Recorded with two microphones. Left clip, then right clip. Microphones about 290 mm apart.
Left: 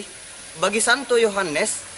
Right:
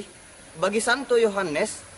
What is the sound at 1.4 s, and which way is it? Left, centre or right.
Speech, centre.